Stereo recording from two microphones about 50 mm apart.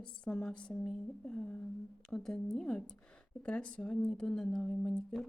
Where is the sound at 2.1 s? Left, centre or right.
Centre.